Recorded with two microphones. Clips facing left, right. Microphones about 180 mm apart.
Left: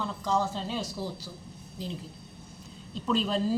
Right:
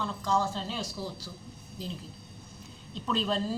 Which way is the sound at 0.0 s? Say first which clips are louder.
Even; 15° left (ahead or behind).